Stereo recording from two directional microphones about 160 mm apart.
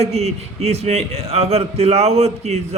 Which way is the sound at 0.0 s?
40° right (ahead or behind).